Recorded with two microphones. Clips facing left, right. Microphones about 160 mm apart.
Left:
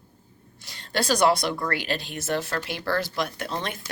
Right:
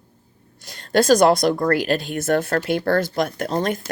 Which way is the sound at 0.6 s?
45° right (ahead or behind).